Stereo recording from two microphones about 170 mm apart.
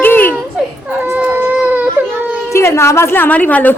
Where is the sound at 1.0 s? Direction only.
10° right (ahead or behind).